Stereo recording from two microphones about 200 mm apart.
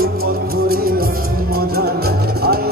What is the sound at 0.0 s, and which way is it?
Music, 50° right (ahead or behind).